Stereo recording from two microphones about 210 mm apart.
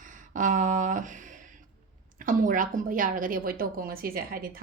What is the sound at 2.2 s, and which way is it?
A woman's voice, 40° right (ahead or behind).